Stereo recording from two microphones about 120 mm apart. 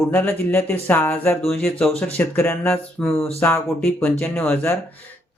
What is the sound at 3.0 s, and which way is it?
Music, 5° left (ahead or behind).